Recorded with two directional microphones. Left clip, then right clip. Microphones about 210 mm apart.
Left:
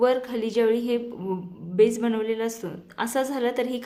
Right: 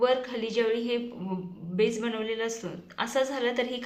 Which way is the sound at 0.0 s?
55° left (ahead or behind).